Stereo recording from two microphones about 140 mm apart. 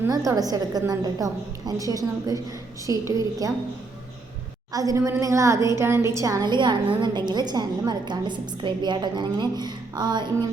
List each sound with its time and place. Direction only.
0.0 s a woman's voice: 25° right (ahead or behind)
4.7 s a woman's voice: 25° right (ahead or behind)